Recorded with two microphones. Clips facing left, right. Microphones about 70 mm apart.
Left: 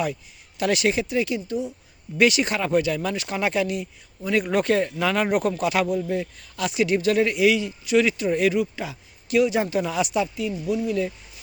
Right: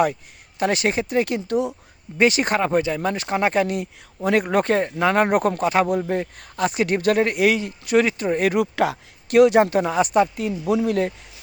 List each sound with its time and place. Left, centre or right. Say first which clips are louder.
0.6 s speech: right 1 dB; right
2.1 s speech: right 2 dB; right
4.2 s speech: right 4 dB; right
4.4 s speech: right 2 dB; right
5.2 s speech: right 3 dB; right
5.9 s speech: right 2 dB; right
8.5 s speech: right 5 dB; right
10.7 s speech: right 5 dB; right